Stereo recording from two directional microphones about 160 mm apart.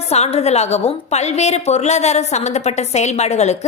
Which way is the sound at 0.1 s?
40° left (ahead or behind).